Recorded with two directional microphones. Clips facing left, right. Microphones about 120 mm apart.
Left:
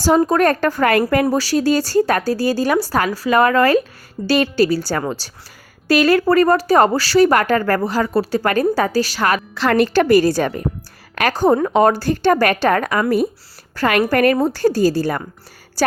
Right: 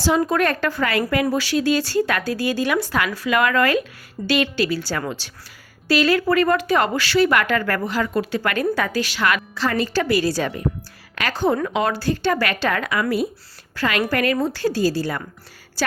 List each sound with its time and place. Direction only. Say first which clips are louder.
0.2 s speech: left 5 dB; 40° left (ahead or behind)
9.6 s a woman's voice: left 6 dB; 65° left (ahead or behind); by 15.2 s 45° left (ahead or behind)